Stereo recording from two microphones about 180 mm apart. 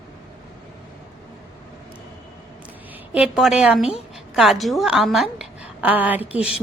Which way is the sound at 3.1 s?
5° right (ahead or behind).